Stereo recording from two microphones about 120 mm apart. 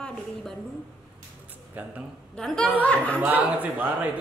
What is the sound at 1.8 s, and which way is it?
Speech, 15° right (ahead or behind).